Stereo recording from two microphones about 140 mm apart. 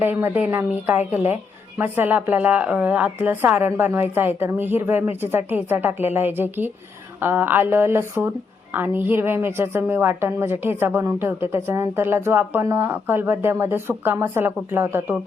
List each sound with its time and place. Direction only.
0.0 s a woman's voice: 15° right (ahead or behind)